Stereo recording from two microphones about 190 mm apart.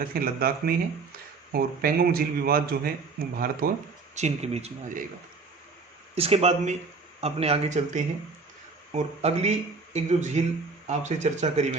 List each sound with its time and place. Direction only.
0.0 s speech: 50° right (ahead or behind)
4.1 s speech: 35° right (ahead or behind)
6.1 s speech: 30° right (ahead or behind)